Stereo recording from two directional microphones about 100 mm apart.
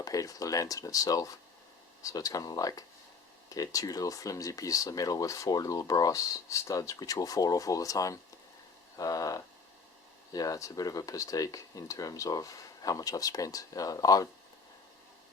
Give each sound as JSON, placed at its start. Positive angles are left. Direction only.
{"t": 0.0, "sound": "speech", "side_deg": 35}